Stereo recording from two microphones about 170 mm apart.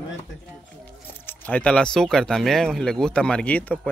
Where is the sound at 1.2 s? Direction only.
10° left (ahead or behind).